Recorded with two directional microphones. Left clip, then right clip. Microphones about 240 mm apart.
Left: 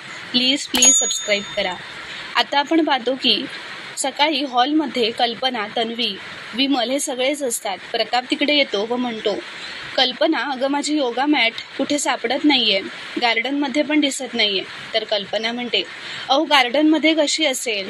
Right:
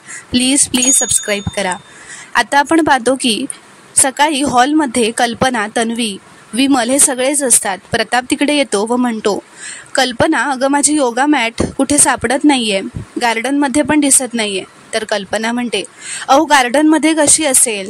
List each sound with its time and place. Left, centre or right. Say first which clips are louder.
1.0 s speech: right 3 dB; right